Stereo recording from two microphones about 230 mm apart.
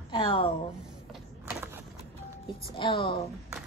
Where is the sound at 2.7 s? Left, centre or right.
Left.